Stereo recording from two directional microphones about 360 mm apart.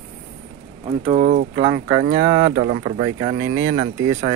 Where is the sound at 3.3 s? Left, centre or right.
Right.